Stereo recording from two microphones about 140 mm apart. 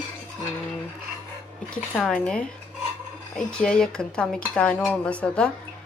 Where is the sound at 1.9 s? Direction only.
5° left (ahead or behind).